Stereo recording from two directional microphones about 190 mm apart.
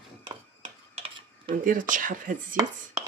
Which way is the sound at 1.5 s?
45° right (ahead or behind).